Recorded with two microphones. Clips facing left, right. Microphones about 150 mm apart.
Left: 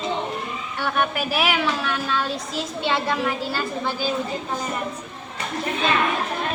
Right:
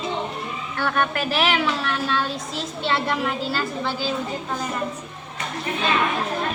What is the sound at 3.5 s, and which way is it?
Speech, 15° left (ahead or behind).